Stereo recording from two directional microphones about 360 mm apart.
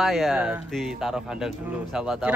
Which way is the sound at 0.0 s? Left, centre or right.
Centre.